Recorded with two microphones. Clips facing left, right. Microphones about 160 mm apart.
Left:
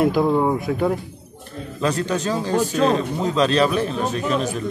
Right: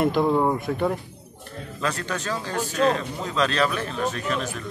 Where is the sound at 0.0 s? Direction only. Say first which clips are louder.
Left 3 dB; 5° left (ahead or behind).